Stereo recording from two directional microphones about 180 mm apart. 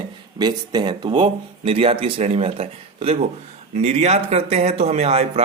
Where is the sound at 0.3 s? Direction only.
20° right (ahead or behind).